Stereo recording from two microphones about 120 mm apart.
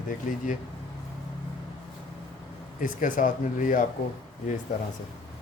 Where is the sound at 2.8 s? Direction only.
90° left.